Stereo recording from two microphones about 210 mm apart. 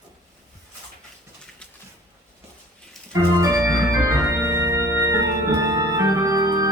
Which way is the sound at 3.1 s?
15° right (ahead or behind).